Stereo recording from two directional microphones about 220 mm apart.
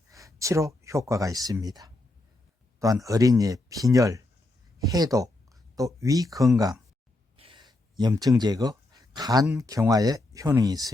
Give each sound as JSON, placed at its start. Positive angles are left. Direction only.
{"t": 0.1, "sound": "speech", "side_deg": -15}
{"t": 7.3, "sound": "a sound", "side_deg": -25}
{"t": 7.7, "sound": "speech", "side_deg": -20}